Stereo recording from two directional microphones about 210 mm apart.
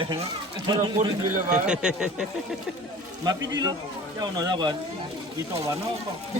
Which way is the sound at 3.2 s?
20° right (ahead or behind).